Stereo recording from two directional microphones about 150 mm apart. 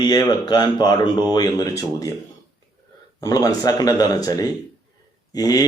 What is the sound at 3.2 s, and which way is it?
Speech, 25° left (ahead or behind).